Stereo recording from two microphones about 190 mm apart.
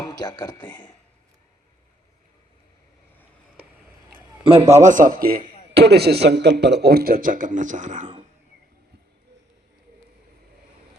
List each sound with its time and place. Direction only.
0.0 s speech: 20° left (ahead or behind)
4.4 s a man's voice: 30° right (ahead or behind); by 5.4 s 45° right (ahead or behind)
5.7 s speech: 60° right (ahead or behind); by 8.1 s 40° right (ahead or behind)